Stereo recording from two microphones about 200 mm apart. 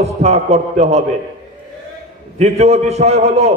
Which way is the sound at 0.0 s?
35° right (ahead or behind).